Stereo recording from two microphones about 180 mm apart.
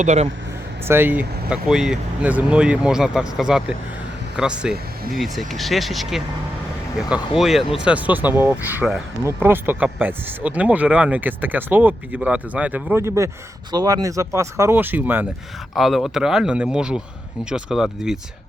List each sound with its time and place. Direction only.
0.0 s speech: 40° right (ahead or behind)
0.9 s speech: 10° right (ahead or behind)